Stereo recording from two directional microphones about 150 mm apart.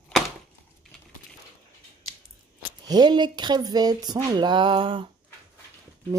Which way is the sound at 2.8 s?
30° right (ahead or behind).